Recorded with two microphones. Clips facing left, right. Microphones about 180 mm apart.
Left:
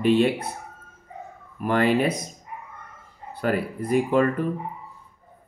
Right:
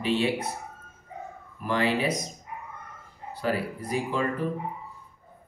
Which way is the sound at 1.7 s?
55° left (ahead or behind).